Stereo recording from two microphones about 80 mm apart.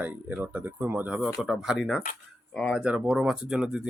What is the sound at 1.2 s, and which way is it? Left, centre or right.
Speech, centre.